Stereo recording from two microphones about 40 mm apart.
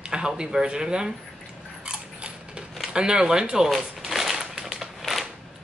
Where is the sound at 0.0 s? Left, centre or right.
Centre.